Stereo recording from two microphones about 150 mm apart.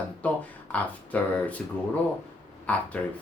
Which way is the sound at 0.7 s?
10° left (ahead or behind).